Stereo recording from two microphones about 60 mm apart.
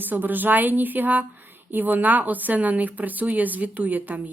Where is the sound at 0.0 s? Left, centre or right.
Right.